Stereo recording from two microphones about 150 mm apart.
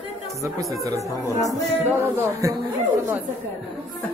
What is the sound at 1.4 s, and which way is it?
Music, 20° right (ahead or behind).